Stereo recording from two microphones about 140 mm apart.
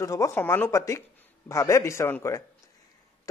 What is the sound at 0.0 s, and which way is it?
Speech, 20° left (ahead or behind).